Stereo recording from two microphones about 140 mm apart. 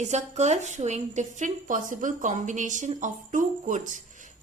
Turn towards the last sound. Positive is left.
turn(degrees=-60)  # may be behind; listen again after turning